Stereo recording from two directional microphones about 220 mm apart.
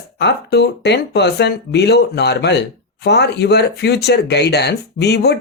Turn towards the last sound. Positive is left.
turn(degrees=50)  # may be behind; listen again after turning